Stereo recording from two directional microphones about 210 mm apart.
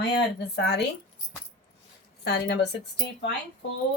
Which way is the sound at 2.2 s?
55° left (ahead or behind).